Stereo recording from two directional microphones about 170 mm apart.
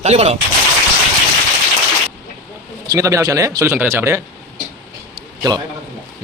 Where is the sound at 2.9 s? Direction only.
20° right (ahead or behind).